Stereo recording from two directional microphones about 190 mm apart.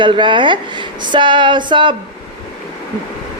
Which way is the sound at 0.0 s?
25° right (ahead or behind).